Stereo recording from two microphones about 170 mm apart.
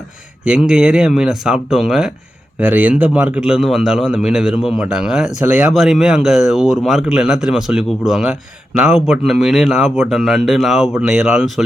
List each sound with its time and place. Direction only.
0.4 s speech: 5° right (ahead or behind)